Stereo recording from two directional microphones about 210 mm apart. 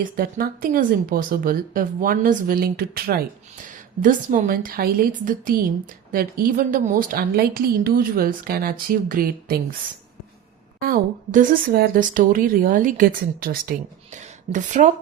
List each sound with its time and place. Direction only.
0.2 s speech: 45° right (ahead or behind)
10.8 s a woman's voice: 45° right (ahead or behind)